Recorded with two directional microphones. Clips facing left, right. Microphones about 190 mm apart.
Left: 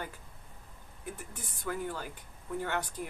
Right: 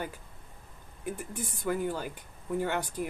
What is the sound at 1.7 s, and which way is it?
Speech, 15° right (ahead or behind).